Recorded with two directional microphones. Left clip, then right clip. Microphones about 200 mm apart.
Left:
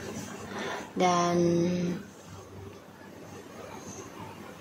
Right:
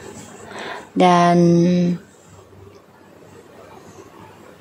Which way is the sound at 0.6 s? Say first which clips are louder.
Right 11 dB; 55° right (ahead or behind).